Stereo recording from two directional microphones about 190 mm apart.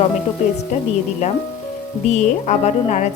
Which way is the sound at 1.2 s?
35° left (ahead or behind).